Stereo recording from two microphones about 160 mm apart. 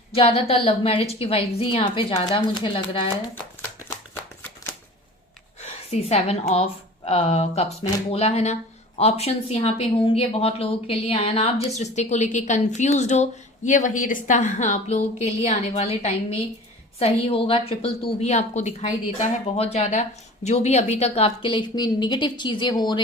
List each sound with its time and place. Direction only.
0.1 s a woman's voice: 40° left (ahead or behind)
5.5 s a sound: 40° left (ahead or behind)
6.5 s a woman's voice: 40° left (ahead or behind)